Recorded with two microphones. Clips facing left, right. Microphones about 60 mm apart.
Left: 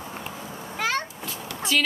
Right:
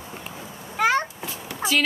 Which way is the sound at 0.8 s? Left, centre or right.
Centre.